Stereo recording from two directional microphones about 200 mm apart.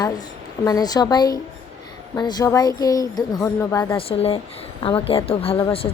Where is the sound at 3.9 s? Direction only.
30° left (ahead or behind).